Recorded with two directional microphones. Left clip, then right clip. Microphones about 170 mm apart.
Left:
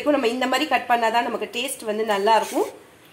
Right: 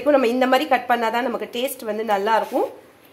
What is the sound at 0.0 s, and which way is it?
A woman's voice, 15° right (ahead or behind).